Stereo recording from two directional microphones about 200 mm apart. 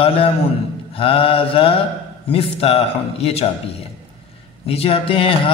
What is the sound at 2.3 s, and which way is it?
A man's voice, 30° left (ahead or behind).